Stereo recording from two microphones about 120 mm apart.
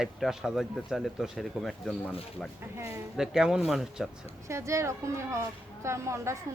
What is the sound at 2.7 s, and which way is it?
Speech, 20° right (ahead or behind).